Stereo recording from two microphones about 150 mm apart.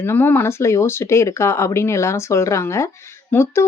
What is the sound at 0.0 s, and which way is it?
Speech, 15° left (ahead or behind).